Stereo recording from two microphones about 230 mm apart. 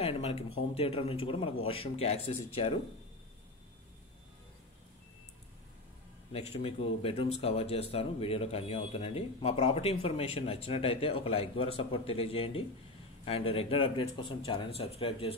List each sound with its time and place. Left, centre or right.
0.0 s speech: left
6.3 s speech: left